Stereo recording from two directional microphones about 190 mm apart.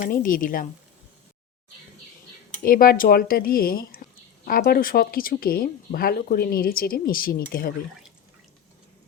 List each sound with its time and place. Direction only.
0.0 s speech: 45° left (ahead or behind)
2.6 s speech: 50° left (ahead or behind)